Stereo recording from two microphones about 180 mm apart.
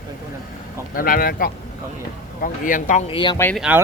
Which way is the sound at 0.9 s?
55° left (ahead or behind).